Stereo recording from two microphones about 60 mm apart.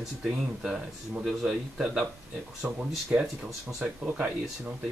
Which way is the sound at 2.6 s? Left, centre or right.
Right.